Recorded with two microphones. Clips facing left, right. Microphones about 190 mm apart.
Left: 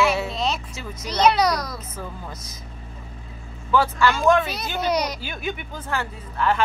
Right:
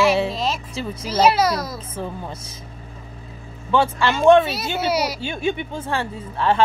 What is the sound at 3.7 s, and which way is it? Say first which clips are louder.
Speech: right 1 dB; 25° right (ahead or behind).